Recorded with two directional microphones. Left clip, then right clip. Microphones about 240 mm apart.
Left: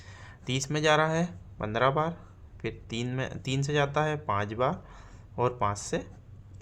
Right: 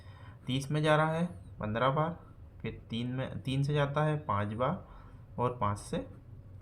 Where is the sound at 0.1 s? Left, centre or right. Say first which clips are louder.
Left 4 dB; left.